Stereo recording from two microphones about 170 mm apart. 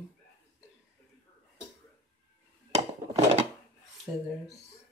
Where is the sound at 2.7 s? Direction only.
40° right (ahead or behind).